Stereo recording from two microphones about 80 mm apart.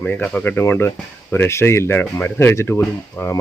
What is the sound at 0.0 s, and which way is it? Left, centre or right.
Speech, left.